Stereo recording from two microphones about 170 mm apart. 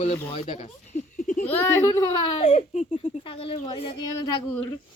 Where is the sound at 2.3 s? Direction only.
40° left (ahead or behind).